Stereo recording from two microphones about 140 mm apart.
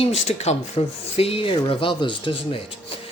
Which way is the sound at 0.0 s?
50° left (ahead or behind).